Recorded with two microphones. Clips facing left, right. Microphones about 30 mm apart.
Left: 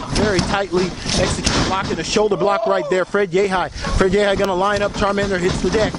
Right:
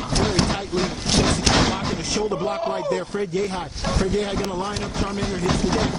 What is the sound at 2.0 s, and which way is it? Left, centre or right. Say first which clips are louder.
Speech: left 7 dB; left.